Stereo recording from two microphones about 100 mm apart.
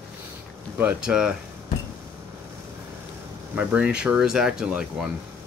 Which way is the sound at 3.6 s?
15° right (ahead or behind).